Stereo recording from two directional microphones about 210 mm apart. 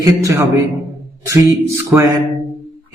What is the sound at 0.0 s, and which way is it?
A man's voice, 15° right (ahead or behind).